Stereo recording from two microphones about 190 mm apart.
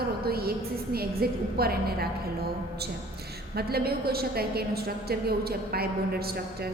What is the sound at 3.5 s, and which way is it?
A woman's voice, 55° right (ahead or behind).